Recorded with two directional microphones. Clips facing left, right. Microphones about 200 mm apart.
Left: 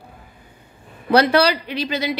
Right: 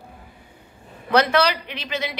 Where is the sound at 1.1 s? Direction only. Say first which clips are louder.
Left 3 dB; 35° left (ahead or behind).